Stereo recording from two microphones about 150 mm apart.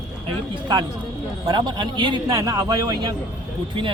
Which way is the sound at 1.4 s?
30° right (ahead or behind).